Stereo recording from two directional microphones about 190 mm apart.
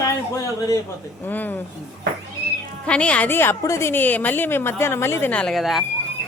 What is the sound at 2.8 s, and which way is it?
A woman's voice, 5° left (ahead or behind).